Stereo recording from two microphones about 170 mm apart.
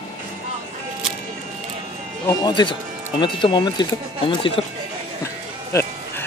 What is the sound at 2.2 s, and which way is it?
Speech, 25° left (ahead or behind).